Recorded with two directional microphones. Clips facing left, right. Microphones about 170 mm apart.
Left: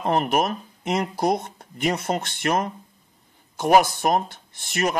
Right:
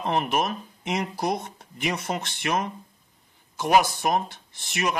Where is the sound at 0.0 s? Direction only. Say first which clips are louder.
Left 3 dB; 45° left (ahead or behind).